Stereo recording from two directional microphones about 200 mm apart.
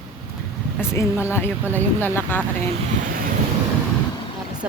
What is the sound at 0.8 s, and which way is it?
Speech, 10° left (ahead or behind).